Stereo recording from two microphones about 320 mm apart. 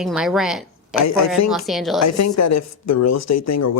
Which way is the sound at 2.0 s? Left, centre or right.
Left.